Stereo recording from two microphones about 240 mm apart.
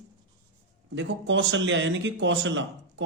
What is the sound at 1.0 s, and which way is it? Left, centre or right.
Speech, right.